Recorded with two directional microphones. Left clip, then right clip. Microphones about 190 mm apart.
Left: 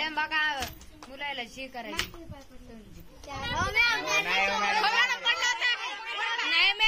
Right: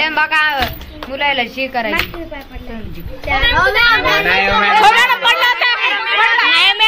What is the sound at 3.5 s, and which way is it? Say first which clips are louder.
A woman's voice: right 12 dB; 25° right (ahead or behind).